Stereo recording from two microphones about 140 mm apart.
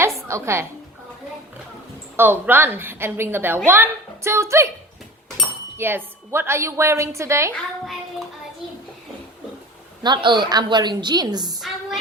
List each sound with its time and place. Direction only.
0.3 s a woman's voice: 20° right (ahead or behind)
2.1 s a woman's voice: 15° right (ahead or behind)
5.7 s a woman's voice: 15° right (ahead or behind)
10.0 s a woman's voice: 35° right (ahead or behind)